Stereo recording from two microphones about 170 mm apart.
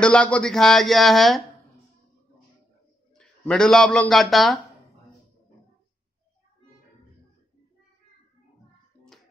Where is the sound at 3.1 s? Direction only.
5° left (ahead or behind).